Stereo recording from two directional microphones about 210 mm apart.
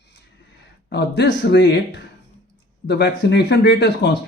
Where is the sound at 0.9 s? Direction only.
50° left (ahead or behind).